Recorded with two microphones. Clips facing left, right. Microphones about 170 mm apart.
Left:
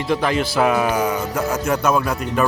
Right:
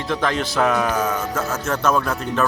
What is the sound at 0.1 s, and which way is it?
Speech, 10° left (ahead or behind).